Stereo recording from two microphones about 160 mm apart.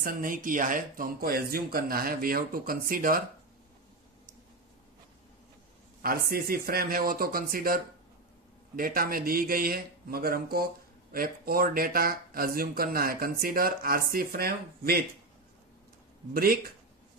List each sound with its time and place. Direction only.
0.0 s speech: 60° right (ahead or behind)
6.0 s speech: 70° right (ahead or behind)
16.3 s speech: 70° right (ahead or behind)